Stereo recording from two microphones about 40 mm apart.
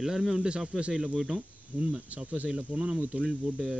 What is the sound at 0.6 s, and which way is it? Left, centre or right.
Speech, right.